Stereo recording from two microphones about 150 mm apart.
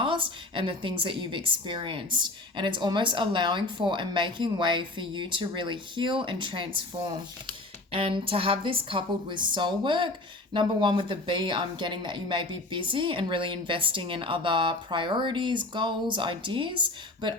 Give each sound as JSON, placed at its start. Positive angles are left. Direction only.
{"t": 0.0, "sound": "a woman's voice", "side_deg": -35}